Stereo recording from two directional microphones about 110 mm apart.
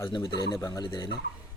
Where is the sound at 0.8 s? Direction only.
45° left (ahead or behind).